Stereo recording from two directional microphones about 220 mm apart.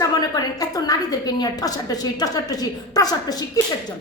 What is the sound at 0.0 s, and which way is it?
A woman's voice, 15° left (ahead or behind).